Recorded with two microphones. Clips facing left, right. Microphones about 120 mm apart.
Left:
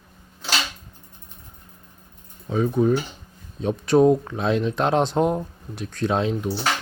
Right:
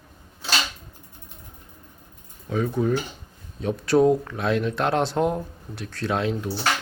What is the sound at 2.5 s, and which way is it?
Speech, 20° left (ahead or behind).